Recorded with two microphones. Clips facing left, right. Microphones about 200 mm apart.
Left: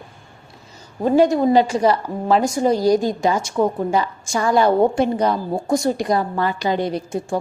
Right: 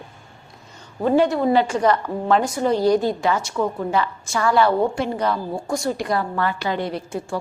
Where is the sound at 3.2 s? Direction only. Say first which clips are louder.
Left 3 dB; 15° left (ahead or behind).